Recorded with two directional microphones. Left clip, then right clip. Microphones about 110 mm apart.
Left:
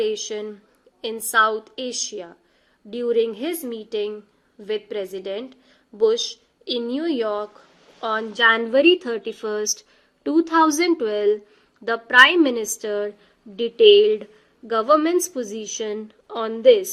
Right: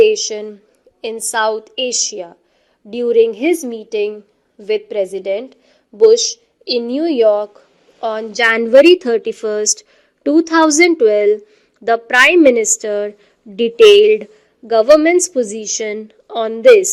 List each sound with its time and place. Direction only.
0.0 s a woman's voice: 45° right (ahead or behind)